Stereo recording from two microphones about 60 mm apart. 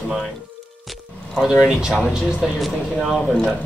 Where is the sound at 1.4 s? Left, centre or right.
Centre.